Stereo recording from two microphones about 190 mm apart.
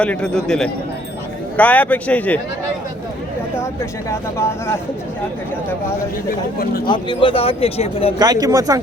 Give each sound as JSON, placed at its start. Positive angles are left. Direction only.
{"t": 0.0, "sound": "a man's voice", "side_deg": 5}
{"t": 4.1, "sound": "speech", "side_deg": 15}
{"t": 6.8, "sound": "a man's voice", "side_deg": 25}
{"t": 8.2, "sound": "speech", "side_deg": -20}